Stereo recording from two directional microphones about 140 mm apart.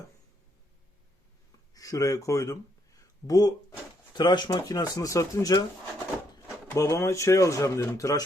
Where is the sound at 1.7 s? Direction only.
25° left (ahead or behind).